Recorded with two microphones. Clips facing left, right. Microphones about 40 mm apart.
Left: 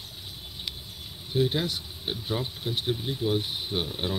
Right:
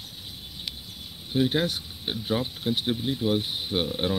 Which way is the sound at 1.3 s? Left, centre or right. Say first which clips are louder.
Right 2 dB; right.